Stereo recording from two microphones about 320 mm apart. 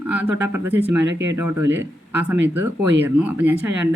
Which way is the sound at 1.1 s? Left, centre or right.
Right.